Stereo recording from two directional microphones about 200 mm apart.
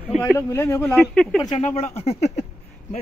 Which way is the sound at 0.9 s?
Centre (ahead or behind).